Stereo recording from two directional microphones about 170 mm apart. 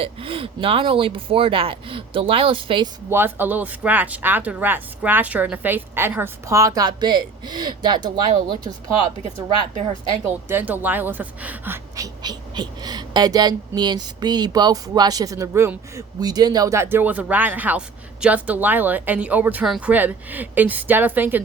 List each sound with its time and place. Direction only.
0.0 s speech: 35° right (ahead or behind)
3.1 s speech: 10° right (ahead or behind)
10.5 s speech: 10° right (ahead or behind)